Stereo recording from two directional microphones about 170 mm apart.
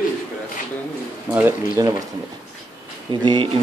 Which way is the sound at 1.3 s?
10° right (ahead or behind).